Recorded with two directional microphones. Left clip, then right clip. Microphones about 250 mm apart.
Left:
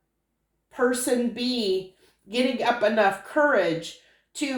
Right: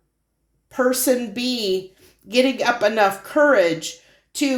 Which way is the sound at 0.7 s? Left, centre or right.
Right.